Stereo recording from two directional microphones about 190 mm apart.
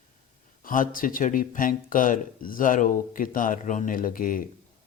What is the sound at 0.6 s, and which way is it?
Speech, 45° left (ahead or behind).